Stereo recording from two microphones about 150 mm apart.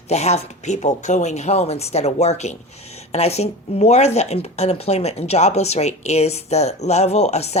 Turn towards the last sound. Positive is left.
turn(degrees=45)  # may be behind; listen again after turning